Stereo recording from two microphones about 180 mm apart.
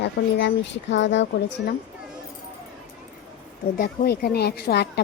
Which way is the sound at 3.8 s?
60° left (ahead or behind).